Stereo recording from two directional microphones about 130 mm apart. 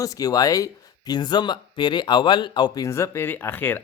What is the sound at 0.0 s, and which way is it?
Speech, 25° left (ahead or behind).